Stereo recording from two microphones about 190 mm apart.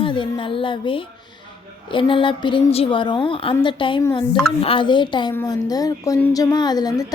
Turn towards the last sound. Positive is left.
turn(degrees=20)  # may be behind; listen again after turning